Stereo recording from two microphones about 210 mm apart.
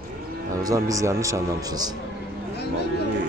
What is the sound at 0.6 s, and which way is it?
Speech, 15° right (ahead or behind).